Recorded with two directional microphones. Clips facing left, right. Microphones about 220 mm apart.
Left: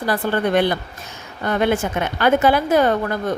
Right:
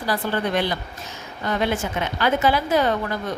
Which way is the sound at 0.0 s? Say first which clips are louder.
Left 4 dB; 55° left (ahead or behind).